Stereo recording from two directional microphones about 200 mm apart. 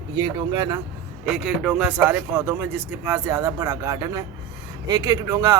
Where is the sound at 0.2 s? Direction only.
20° right (ahead or behind).